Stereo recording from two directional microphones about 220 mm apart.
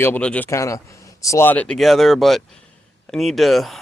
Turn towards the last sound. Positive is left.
turn(degrees=0)  # may be behind; listen again after turning